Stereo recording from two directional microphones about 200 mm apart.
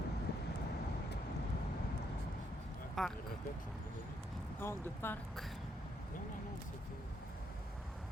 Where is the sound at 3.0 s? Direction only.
Centre (ahead or behind).